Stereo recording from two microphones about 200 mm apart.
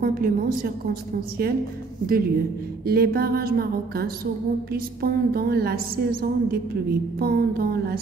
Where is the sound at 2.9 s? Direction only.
50° right (ahead or behind).